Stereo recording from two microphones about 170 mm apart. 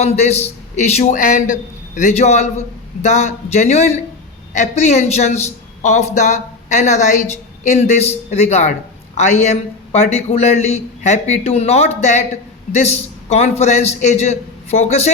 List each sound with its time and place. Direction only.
0.0 s a man's voice: 40° left (ahead or behind)